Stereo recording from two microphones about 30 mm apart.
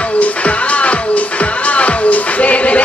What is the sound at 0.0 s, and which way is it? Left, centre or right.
Music, left.